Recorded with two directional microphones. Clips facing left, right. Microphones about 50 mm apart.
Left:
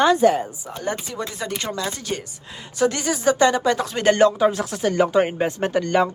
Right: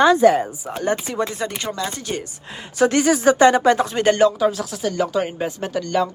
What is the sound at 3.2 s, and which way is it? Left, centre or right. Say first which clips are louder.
Speech: right 2 dB; right.